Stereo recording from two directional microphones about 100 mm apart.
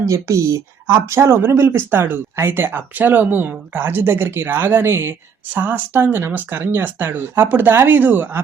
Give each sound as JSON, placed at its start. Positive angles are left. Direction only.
{"t": 0.1, "sound": "speech", "side_deg": -30}